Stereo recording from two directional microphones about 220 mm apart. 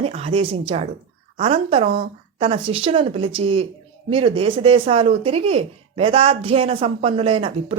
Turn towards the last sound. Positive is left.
turn(degrees=-25)  # may be behind; listen again after turning